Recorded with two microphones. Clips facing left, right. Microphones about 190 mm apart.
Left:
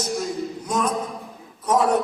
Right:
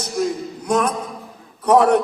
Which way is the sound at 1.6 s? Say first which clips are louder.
Right 6 dB; 65° right (ahead or behind).